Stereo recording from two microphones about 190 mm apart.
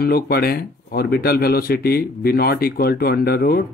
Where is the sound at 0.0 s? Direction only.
55° left (ahead or behind).